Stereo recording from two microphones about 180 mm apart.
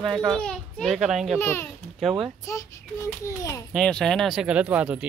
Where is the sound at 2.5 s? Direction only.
15° left (ahead or behind).